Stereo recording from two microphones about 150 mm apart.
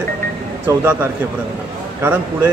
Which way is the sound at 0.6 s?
15° right (ahead or behind).